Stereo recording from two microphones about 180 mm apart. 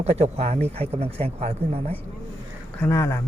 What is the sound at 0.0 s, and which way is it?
Speech, 35° right (ahead or behind).